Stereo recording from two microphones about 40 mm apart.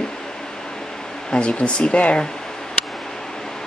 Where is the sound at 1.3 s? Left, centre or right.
Left.